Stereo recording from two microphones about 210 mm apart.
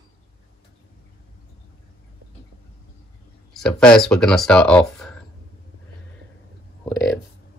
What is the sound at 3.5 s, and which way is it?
Speech, 5° left (ahead or behind).